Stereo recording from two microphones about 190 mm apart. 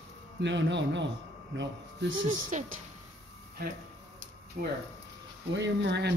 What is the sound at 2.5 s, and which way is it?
Speech, 40° right (ahead or behind).